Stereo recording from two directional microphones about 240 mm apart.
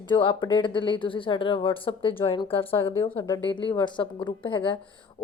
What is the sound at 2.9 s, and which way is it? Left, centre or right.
A woman's voice, centre.